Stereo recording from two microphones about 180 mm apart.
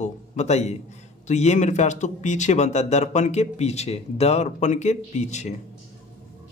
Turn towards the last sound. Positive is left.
turn(degrees=40)  # may be behind; listen again after turning